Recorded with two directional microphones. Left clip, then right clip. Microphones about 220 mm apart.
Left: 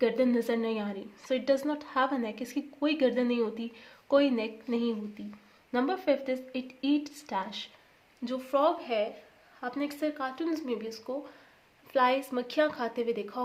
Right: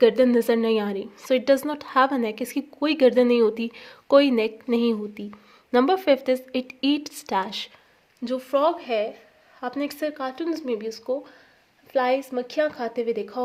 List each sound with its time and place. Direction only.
0.0 s speech: 40° right (ahead or behind)
8.2 s speech: 35° right (ahead or behind)
11.9 s a woman's voice: 15° right (ahead or behind)